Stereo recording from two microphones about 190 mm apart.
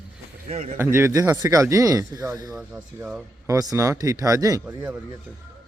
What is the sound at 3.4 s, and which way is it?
Speech, 20° right (ahead or behind).